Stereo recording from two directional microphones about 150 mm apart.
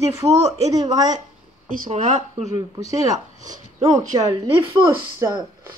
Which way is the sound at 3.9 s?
30° right (ahead or behind).